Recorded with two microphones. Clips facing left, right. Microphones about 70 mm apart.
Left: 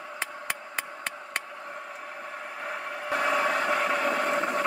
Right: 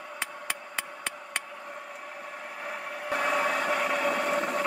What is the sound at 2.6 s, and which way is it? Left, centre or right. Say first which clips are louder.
Vehicle: left 2 dB; centre.